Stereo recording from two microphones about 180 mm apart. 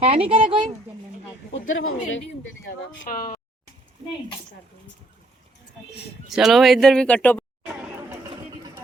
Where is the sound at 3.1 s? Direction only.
55° left (ahead or behind).